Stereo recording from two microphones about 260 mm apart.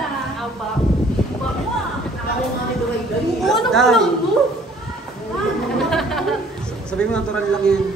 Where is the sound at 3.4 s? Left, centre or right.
Centre.